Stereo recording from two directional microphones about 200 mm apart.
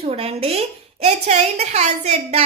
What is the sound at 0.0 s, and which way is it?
A woman's voice, 30° right (ahead or behind).